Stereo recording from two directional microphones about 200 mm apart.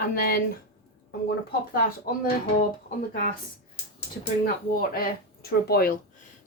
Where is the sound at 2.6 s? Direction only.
40° left (ahead or behind).